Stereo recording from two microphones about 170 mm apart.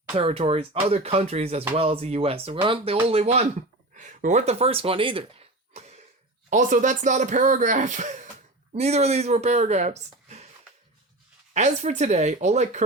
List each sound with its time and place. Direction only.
0.1 s speech: 35° right (ahead or behind)
5.7 s cough: 40° right (ahead or behind)
6.5 s speech: 50° right (ahead or behind)
11.5 s speech: 45° right (ahead or behind)